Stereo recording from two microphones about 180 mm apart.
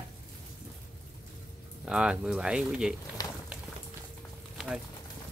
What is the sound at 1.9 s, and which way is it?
Speech, 5° right (ahead or behind).